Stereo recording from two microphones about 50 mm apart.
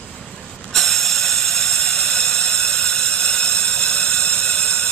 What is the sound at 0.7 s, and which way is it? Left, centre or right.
Mechanisms, centre.